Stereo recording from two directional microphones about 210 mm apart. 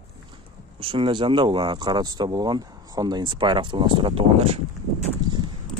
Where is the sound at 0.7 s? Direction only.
25° right (ahead or behind).